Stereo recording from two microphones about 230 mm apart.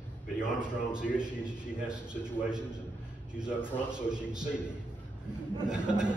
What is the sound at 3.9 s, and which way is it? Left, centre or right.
Speech, centre.